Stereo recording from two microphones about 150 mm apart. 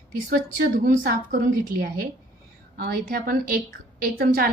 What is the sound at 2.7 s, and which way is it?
A woman's voice, 90° right.